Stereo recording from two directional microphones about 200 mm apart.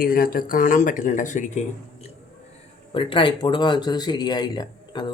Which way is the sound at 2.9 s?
25° left (ahead or behind).